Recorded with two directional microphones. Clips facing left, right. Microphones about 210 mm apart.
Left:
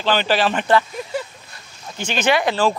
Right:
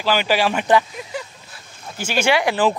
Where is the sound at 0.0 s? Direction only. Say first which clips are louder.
Even; 10° right (ahead or behind).